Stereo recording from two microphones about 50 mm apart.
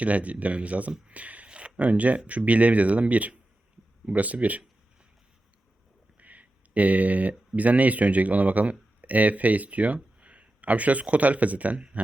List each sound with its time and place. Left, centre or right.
0.0 s speech: right
6.1 s speech: right